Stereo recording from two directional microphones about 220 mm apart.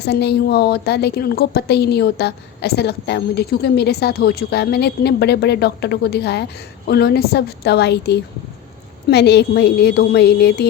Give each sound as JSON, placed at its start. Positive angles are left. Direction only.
{"t": 0.0, "sound": "a woman's voice", "side_deg": 50}